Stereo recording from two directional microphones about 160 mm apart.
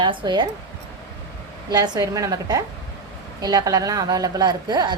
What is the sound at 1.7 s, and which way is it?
A woman's voice, 25° right (ahead or behind).